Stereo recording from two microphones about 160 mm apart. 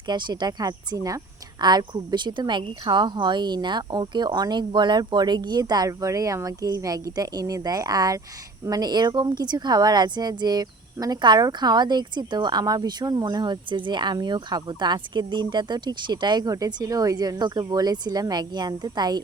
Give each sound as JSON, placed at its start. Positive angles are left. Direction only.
{"t": 0.1, "sound": "speech", "side_deg": -25}